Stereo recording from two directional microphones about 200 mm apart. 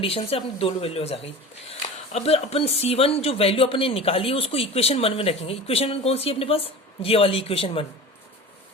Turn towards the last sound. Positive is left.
turn(degrees=30)  # may be behind; listen again after turning